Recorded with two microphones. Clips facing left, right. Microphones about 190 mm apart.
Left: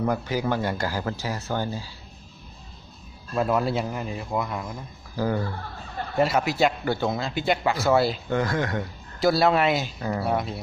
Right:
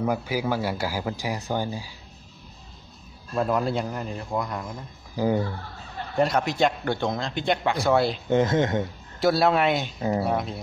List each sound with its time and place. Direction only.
0.0 s speech: 10° right (ahead or behind)
3.3 s speech: 5° left (ahead or behind)
5.1 s speech: 15° right (ahead or behind)
6.1 s speech: 5° left (ahead or behind)
8.3 s speech: 20° right (ahead or behind)
9.2 s speech: centre (ahead or behind)
9.9 s speech: 20° right (ahead or behind)
10.2 s speech: centre (ahead or behind)